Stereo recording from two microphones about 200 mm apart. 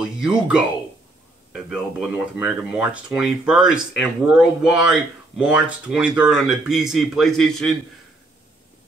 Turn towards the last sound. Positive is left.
turn(degrees=0)  # may be behind; listen again after turning